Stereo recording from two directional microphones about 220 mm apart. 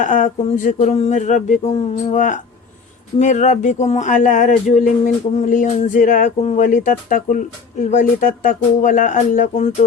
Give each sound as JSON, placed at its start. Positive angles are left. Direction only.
{"t": 0.0, "sound": "speech", "side_deg": 35}